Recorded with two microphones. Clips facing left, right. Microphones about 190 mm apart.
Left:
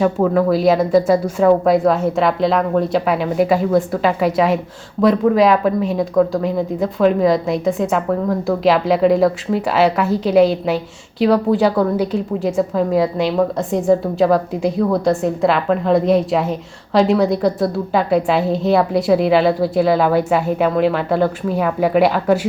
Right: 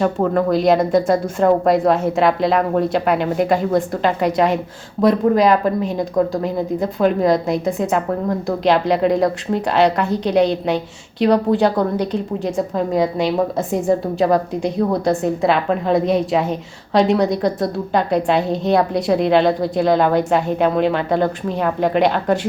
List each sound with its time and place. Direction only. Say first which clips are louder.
0.0 s a woman's voice: left 2 dB; 5° left (ahead or behind)